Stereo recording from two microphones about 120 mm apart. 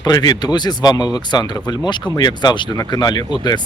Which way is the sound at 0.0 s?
35° left (ahead or behind).